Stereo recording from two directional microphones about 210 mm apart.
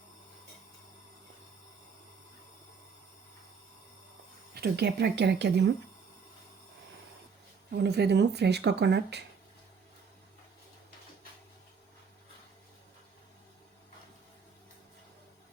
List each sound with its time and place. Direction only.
4.5 s speech: 50° right (ahead or behind)
7.7 s speech: 50° right (ahead or behind)